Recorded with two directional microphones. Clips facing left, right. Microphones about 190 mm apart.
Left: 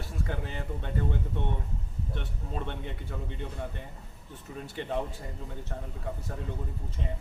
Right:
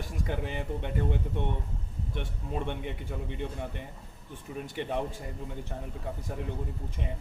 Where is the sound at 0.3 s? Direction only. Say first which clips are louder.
Right 5 dB; 15° right (ahead or behind).